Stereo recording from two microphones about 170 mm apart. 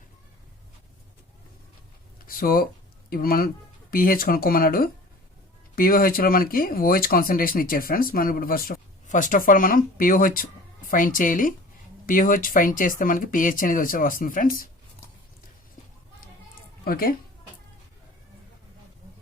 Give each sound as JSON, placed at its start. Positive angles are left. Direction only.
{"t": 2.1, "sound": "a sound", "side_deg": 55}
{"t": 3.1, "sound": "speech", "side_deg": 60}
{"t": 16.8, "sound": "speech", "side_deg": 60}